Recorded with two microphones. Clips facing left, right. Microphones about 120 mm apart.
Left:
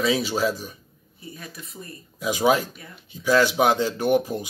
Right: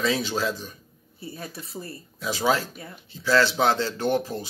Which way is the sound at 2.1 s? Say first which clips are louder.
Left 4 dB; 15° left (ahead or behind).